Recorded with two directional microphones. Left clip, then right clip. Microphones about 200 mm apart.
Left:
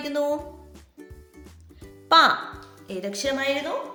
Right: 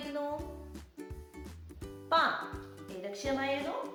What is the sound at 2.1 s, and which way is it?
Speech, 45° left (ahead or behind).